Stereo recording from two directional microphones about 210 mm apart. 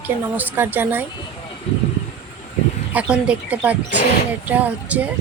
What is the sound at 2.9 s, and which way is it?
A woman's voice, 5° right (ahead or behind).